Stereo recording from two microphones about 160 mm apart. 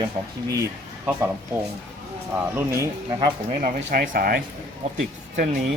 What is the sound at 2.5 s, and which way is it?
Speech, 15° right (ahead or behind).